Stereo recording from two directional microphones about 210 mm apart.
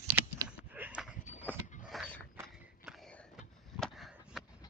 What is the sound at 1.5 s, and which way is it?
Mechanisms, 10° right (ahead or behind).